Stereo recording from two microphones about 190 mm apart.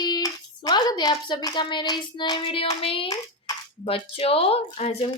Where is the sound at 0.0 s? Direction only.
20° left (ahead or behind).